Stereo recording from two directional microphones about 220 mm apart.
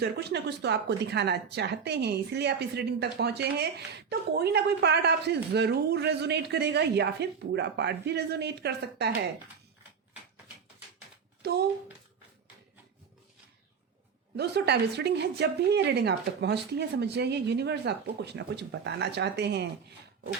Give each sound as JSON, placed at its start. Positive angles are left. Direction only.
{"t": 0.0, "sound": "speech", "side_deg": -50}
{"t": 14.3, "sound": "speech", "side_deg": -50}